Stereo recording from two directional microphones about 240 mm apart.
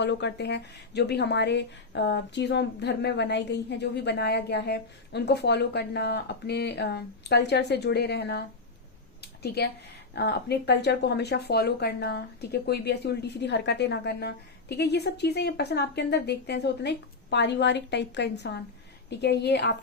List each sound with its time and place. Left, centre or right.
0.0 s speech: left
9.2 s a sound: left
10.2 s speech: left